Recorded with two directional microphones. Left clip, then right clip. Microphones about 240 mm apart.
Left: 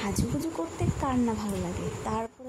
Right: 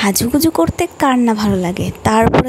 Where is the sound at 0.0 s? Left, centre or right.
Right.